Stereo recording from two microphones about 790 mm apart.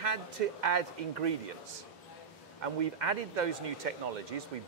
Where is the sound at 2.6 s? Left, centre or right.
Right.